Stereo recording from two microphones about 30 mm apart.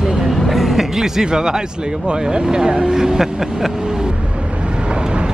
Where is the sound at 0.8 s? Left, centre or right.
Centre.